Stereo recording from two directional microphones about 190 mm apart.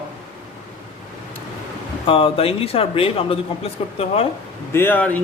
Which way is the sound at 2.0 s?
30° left (ahead or behind).